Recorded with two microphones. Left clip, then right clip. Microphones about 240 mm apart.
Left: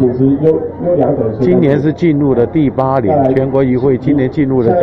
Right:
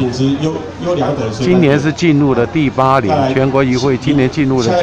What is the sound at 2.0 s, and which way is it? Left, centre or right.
A man's voice, right.